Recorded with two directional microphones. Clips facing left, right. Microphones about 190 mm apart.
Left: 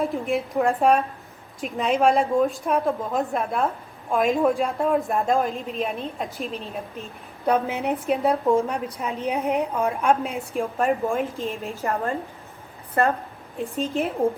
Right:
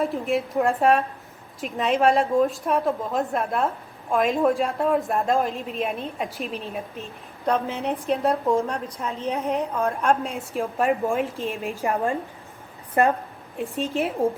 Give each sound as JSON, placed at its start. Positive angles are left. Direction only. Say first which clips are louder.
{"t": 0.0, "sound": "a woman's voice", "louder": "even", "side_deg": 0}
{"t": 7.4, "sound": "a woman's voice", "louder": "left 2 dB", "side_deg": 10}
{"t": 13.6, "sound": "a woman's voice", "louder": "even", "side_deg": 0}